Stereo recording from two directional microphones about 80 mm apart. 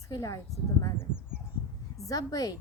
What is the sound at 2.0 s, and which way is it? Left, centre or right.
Speech, left.